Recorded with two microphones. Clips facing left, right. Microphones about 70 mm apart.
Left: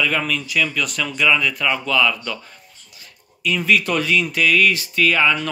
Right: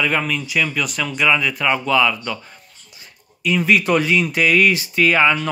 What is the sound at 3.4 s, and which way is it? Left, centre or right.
A man's voice, centre.